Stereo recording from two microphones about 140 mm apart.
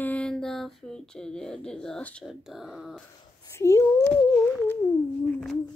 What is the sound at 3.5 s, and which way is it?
Speech, 20° left (ahead or behind).